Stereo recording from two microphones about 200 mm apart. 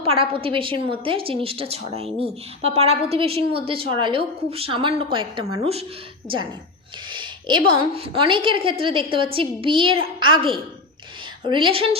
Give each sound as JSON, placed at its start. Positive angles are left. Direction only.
{"t": 0.0, "sound": "a woman's voice", "side_deg": -30}